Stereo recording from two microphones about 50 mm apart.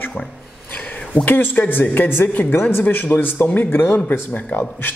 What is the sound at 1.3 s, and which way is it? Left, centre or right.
Speech, left.